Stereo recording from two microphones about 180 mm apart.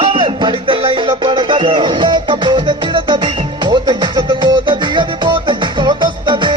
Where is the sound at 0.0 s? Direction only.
25° right (ahead or behind).